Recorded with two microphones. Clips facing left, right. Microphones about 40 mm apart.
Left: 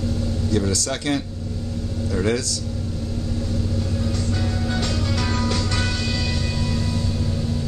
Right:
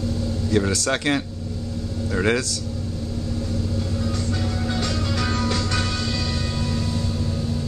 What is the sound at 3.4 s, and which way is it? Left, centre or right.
Vehicle, centre.